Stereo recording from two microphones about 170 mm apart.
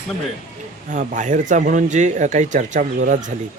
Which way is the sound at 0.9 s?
45° right (ahead or behind).